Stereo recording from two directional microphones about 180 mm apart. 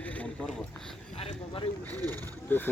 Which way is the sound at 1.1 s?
30° left (ahead or behind).